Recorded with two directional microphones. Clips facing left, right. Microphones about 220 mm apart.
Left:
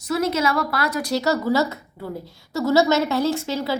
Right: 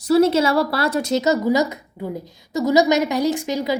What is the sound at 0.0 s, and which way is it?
A woman's voice, 30° right (ahead or behind).